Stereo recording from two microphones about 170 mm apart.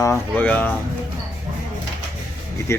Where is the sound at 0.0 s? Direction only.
15° left (ahead or behind).